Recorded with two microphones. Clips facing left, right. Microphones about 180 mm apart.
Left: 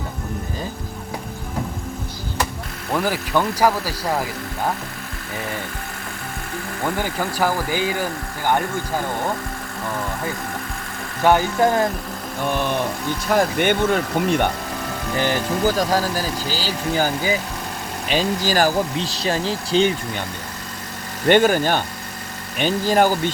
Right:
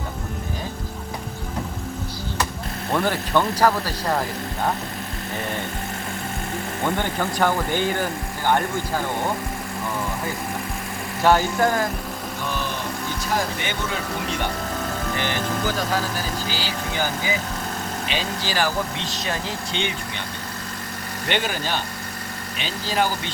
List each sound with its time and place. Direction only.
2.9 s speech: 5° left (ahead or behind)
7.0 s speech: 5° left (ahead or behind)
11.2 s speech: 15° left (ahead or behind)
13.3 s speech: 55° left (ahead or behind)
15.2 s speech: 40° left (ahead or behind)
18.1 s speech: 45° left (ahead or behind)
21.2 s speech: 45° left (ahead or behind)